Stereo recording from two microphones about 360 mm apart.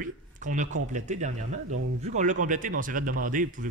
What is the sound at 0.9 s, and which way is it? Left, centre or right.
A man's voice, centre.